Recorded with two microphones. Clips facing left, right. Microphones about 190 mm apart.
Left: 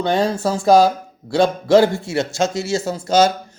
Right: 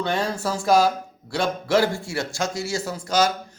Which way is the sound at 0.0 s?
25° left (ahead or behind).